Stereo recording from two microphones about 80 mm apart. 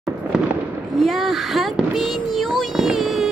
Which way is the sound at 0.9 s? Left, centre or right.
Centre.